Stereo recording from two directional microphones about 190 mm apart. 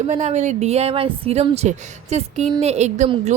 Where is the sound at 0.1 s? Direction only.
35° right (ahead or behind).